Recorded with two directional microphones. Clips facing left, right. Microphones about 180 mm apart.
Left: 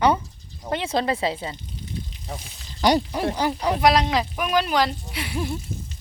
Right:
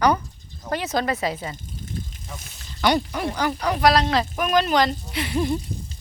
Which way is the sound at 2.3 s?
35° left (ahead or behind).